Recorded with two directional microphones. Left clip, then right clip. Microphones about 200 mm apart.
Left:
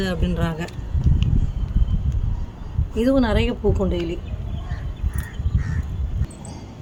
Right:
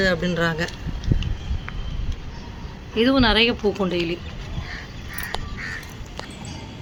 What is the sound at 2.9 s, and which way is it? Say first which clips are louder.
A woman's voice: right 2 dB; 20° left (ahead or behind).